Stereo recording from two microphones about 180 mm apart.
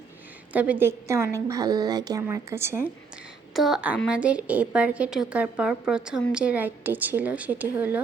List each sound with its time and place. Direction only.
0.5 s a woman's voice: 10° right (ahead or behind)
3.5 s a woman's voice: centre (ahead or behind)